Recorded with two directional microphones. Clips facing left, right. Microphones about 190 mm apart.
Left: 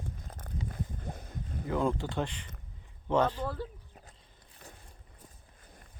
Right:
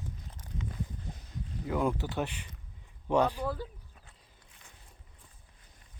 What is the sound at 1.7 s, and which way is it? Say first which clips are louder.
Speech: even; 10° right (ahead or behind).